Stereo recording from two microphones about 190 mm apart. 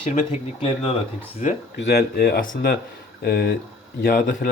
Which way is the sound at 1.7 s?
60° left (ahead or behind).